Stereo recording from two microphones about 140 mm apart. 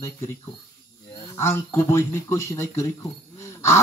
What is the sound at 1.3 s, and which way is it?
Speech, 20° left (ahead or behind).